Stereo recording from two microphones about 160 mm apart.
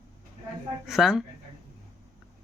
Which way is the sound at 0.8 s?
Centre (ahead or behind).